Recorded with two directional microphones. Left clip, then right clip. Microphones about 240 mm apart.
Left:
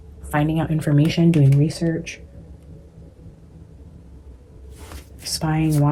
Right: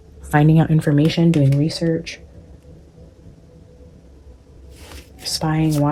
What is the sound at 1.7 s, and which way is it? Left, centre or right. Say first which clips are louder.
Speech: right 4 dB; right.